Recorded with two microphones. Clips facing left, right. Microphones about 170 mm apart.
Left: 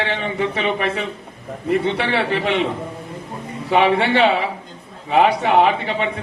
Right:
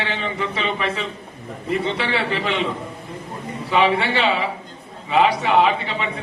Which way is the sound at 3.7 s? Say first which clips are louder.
Left 3 dB; 60° left (ahead or behind).